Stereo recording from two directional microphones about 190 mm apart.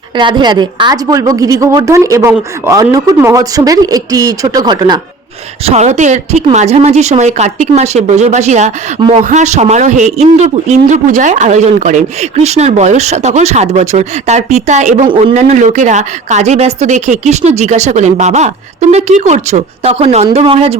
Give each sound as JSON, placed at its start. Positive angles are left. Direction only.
{"t": 0.2, "sound": "a woman's voice", "side_deg": -25}
{"t": 5.6, "sound": "a man's voice", "side_deg": -35}
{"t": 9.0, "sound": "a woman's voice", "side_deg": -25}
{"t": 9.2, "sound": "a man's voice", "side_deg": -35}
{"t": 15.0, "sound": "a man's voice", "side_deg": -25}